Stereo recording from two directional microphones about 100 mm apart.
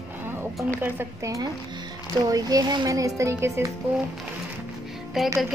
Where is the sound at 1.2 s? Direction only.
35° right (ahead or behind).